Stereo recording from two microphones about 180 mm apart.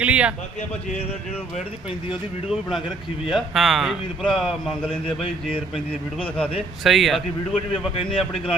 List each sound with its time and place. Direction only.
0.0 s a sound: 5° right (ahead or behind)
2.5 s a man's voice: centre (ahead or behind)
7.7 s speech: 30° left (ahead or behind)